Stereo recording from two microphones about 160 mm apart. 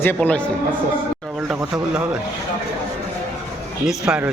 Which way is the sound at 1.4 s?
5° right (ahead or behind).